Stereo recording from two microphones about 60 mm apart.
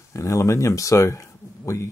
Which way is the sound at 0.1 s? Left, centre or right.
Left.